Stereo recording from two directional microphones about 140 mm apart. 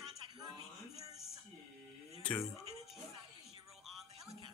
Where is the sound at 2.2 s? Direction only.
10° left (ahead or behind).